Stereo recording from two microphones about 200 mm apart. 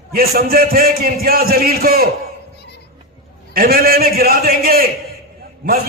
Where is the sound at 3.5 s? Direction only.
50° right (ahead or behind).